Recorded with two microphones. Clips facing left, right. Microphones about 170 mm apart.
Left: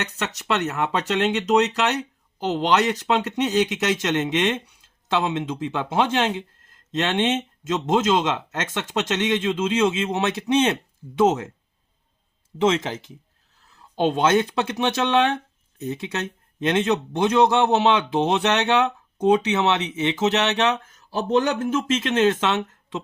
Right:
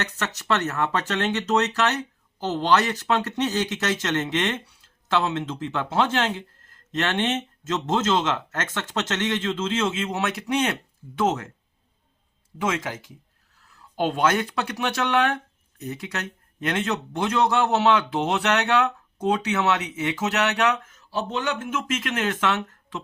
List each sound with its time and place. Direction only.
0.3 s speech: 15° left (ahead or behind)
12.5 s speech: 25° left (ahead or behind)
20.8 s speech: 40° left (ahead or behind); by 23.0 s 20° left (ahead or behind)